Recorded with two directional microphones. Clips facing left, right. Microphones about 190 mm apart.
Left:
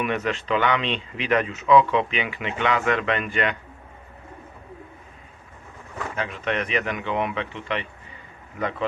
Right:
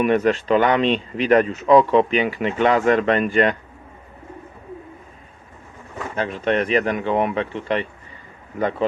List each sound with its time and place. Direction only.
0.0 s speech: 40° right (ahead or behind)
6.1 s speech: 35° right (ahead or behind)